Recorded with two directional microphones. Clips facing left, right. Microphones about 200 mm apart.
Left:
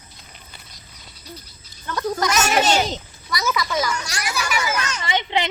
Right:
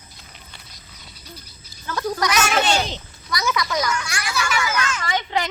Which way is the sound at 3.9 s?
35° left (ahead or behind).